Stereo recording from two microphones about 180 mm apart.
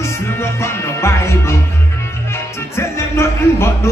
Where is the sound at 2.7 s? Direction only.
15° left (ahead or behind).